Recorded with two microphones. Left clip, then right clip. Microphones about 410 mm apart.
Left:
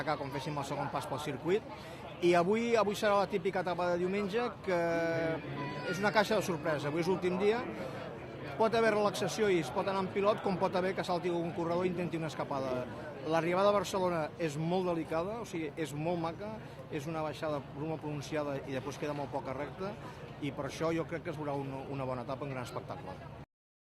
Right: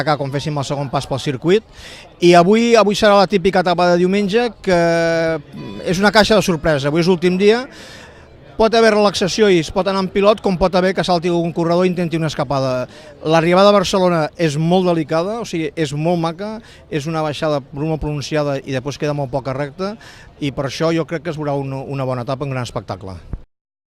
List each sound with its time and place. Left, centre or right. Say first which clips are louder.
0.0 s speech: right 17 dB; right